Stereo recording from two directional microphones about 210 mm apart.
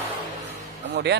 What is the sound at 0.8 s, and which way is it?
Music, 55° right (ahead or behind).